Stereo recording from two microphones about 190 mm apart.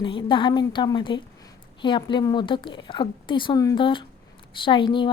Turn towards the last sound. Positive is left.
turn(degrees=25)  # may be behind; listen again after turning